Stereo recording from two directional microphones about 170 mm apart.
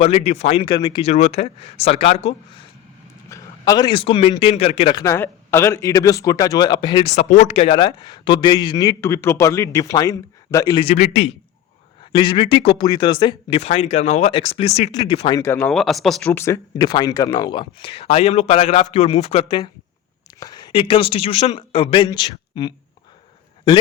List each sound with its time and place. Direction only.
0.0 s speech: 35° left (ahead or behind)
1.1 s speech: 40° left (ahead or behind)
3.2 s a man's voice: 20° left (ahead or behind); by 4.9 s 35° left (ahead or behind)
4.9 s a man's voice: 15° left (ahead or behind)
7.1 s speech: 45° left (ahead or behind)
7.5 s a man's voice: 35° left (ahead or behind)
10.8 s speech: 45° left (ahead or behind)
12.1 s speech: 30° left (ahead or behind)
15.4 s speech: 10° left (ahead or behind)
16.7 s speech: 25° left (ahead or behind)